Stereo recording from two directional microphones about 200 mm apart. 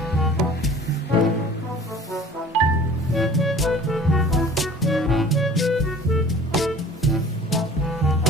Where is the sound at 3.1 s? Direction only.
Centre (ahead or behind).